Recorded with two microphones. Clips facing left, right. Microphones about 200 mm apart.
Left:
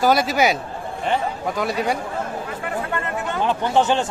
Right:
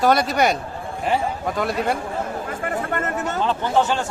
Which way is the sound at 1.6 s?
Centre (ahead or behind).